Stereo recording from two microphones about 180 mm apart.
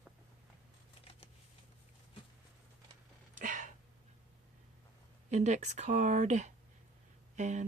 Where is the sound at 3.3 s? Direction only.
45° right (ahead or behind).